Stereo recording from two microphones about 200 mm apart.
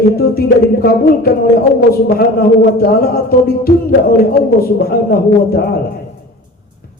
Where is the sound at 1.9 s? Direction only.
50° left (ahead or behind).